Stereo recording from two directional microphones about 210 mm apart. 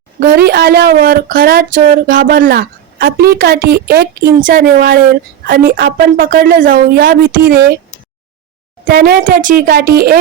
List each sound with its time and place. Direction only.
0.2 s speech: 45° right (ahead or behind)
8.8 s speech: 45° right (ahead or behind)